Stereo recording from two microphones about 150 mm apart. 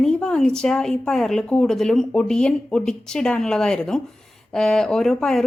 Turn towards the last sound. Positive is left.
turn(degrees=5)  # may be behind; listen again after turning